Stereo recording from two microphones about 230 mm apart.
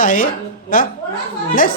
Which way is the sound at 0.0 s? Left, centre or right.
Left.